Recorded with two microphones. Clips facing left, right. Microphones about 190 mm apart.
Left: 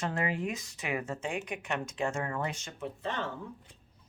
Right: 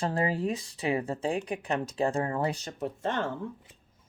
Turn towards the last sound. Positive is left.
turn(degrees=-50)  # may be behind; listen again after turning